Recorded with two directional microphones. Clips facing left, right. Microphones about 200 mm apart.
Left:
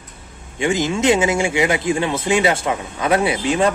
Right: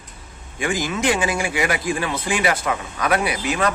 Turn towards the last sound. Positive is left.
turn(degrees=30)  # may be behind; listen again after turning